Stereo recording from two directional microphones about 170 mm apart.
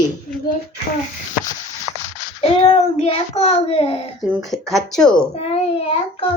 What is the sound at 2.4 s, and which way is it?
A child's voice, 35° left (ahead or behind).